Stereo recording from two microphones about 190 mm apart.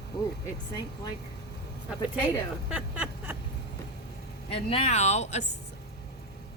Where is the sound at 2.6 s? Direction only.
5° right (ahead or behind).